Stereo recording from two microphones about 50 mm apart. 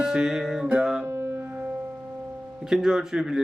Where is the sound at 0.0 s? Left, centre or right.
Centre.